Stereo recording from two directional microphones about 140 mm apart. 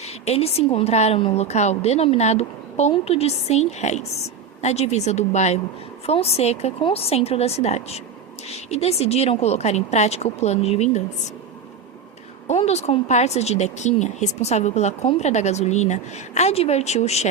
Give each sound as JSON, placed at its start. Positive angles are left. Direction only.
{"t": 0.0, "sound": "speech", "side_deg": 50}
{"t": 12.5, "sound": "speech", "side_deg": 50}